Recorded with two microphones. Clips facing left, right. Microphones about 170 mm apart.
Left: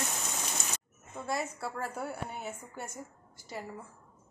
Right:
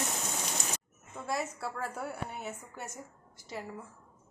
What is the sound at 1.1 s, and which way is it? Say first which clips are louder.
A woman's voice: even; centre (ahead or behind).